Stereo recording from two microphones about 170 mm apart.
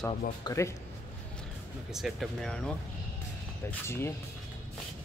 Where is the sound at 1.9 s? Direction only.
Centre (ahead or behind).